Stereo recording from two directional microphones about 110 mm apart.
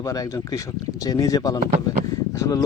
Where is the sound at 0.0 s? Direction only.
30° left (ahead or behind).